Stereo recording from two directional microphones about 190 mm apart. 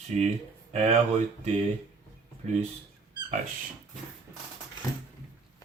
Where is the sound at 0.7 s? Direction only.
35° right (ahead or behind).